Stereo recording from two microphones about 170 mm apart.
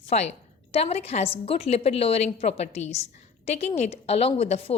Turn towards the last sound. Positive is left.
turn(degrees=35)  # may be behind; listen again after turning